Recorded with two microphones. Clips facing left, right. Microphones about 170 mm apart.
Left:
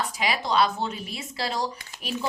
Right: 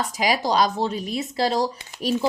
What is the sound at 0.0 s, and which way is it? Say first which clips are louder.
A woman's voice: right 5 dB; 40° right (ahead or behind).